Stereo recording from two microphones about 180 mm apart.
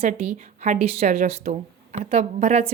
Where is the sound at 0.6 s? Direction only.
40° right (ahead or behind).